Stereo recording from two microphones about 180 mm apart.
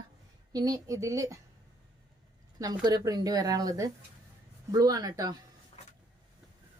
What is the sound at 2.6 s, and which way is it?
A woman's voice, 20° right (ahead or behind).